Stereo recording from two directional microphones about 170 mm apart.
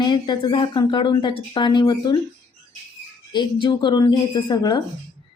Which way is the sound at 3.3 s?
25° left (ahead or behind).